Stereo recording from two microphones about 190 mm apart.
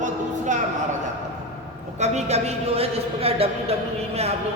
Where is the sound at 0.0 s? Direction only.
40° right (ahead or behind).